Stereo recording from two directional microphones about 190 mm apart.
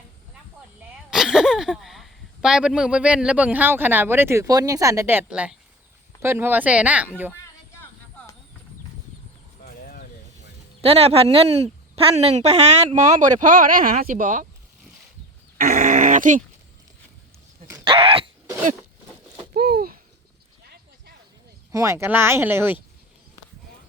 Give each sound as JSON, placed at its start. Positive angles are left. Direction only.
{"t": 1.1, "sound": "speech", "side_deg": 0}
{"t": 9.6, "sound": "a sound", "side_deg": 45}
{"t": 10.8, "sound": "speech", "side_deg": -30}
{"t": 15.5, "sound": "dog", "side_deg": -50}
{"t": 17.8, "sound": "dog", "side_deg": -30}
{"t": 19.5, "sound": "a sound", "side_deg": -50}
{"t": 21.7, "sound": "speech", "side_deg": -15}